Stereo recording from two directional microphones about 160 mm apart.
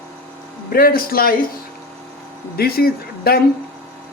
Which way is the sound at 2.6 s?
70° left (ahead or behind).